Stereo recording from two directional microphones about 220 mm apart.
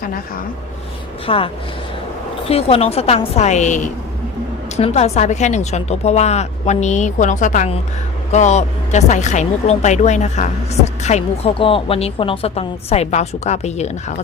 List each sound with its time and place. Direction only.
1.3 s a woman's voice: 25° left (ahead or behind)
2.5 s a woman's voice: 25° left (ahead or behind)